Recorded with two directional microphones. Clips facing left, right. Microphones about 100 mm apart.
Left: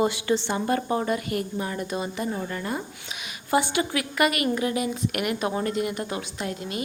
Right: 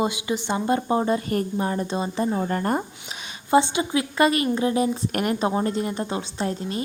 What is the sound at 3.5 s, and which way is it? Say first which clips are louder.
A woman's voice: right 4 dB; 25° right (ahead or behind).